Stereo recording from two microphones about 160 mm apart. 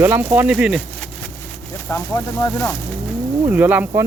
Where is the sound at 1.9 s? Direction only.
20° left (ahead or behind).